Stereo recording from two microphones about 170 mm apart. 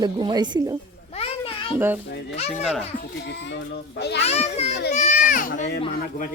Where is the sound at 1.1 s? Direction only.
35° left (ahead or behind).